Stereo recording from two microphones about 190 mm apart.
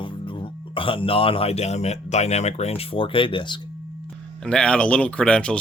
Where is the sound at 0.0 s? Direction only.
25° left (ahead or behind).